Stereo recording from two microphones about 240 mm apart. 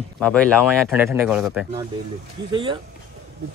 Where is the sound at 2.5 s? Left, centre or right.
Right.